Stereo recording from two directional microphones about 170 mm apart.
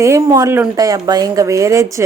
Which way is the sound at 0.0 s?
20° right (ahead or behind).